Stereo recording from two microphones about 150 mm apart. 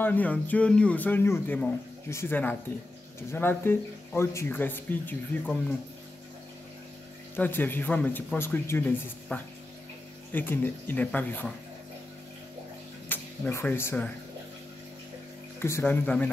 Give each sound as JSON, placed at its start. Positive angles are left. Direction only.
{"t": 0.0, "sound": "speech", "side_deg": 10}
{"t": 7.3, "sound": "speech", "side_deg": 10}
{"t": 13.1, "sound": "speech", "side_deg": 15}
{"t": 15.6, "sound": "speech", "side_deg": 15}